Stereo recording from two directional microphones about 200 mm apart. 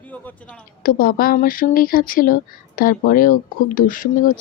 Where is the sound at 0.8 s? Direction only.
45° left (ahead or behind).